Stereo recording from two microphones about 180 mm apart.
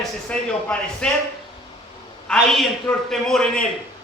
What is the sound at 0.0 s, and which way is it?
A man's voice, 5° left (ahead or behind).